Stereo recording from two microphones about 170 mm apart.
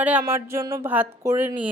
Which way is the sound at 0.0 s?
10° right (ahead or behind).